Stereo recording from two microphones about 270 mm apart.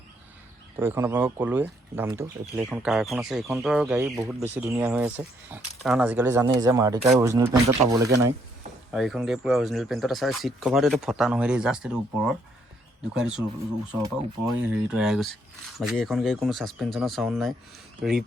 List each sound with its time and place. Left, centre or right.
0.8 s speech: centre